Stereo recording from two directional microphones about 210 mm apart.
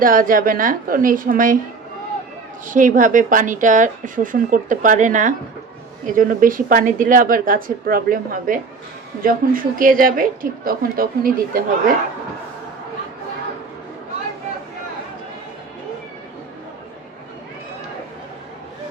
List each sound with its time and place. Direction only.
0.0 s speech: 40° right (ahead or behind)
2.6 s a woman's voice: 40° right (ahead or behind)